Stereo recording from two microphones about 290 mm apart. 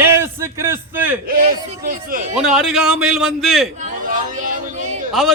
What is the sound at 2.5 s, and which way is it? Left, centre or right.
A man's voice, centre.